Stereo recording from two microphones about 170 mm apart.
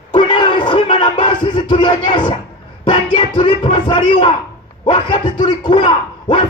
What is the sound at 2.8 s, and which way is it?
A man's voice, 25° left (ahead or behind).